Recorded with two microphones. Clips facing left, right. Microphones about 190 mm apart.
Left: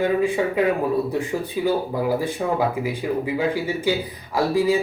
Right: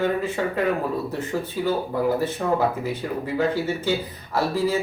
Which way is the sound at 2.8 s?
10° left (ahead or behind).